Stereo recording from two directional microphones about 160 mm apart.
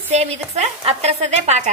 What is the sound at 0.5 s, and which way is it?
Speech, 40° right (ahead or behind).